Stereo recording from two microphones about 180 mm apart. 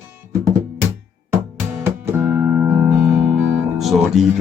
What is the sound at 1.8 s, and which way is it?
Music, 10° right (ahead or behind).